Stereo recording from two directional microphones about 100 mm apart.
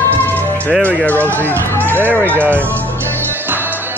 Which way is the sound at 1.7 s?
20° left (ahead or behind).